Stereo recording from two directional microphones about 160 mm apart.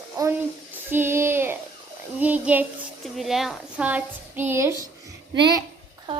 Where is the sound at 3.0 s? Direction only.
Centre (ahead or behind); by 5.6 s 25° right (ahead or behind).